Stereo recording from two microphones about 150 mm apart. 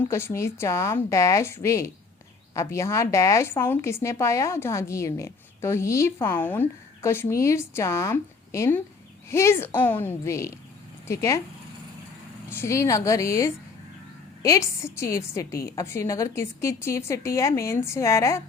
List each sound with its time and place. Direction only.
0.0 s a woman's voice: 15° left (ahead or behind)
12.5 s a woman's voice: 15° left (ahead or behind)